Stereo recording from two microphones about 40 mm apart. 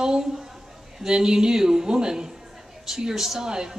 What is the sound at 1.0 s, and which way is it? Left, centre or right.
A woman's voice, centre.